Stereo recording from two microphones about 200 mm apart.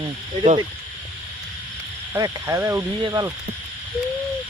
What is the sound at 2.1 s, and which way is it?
Speech, 15° right (ahead or behind).